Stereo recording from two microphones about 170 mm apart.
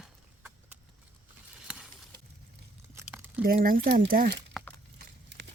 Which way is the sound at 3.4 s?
60° right (ahead or behind).